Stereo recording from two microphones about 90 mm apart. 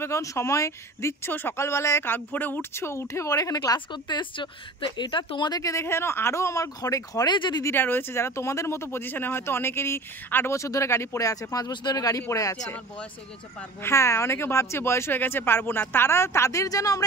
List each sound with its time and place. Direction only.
0.0 s speech: 35° left (ahead or behind)
3.9 s speech: 60° left (ahead or behind)
5.5 s speech: 40° left (ahead or behind)
7.2 s speech: 55° left (ahead or behind)
7.6 s speech: 25° left (ahead or behind); by 12.6 s 40° left (ahead or behind)
13.8 s speech: 30° left (ahead or behind)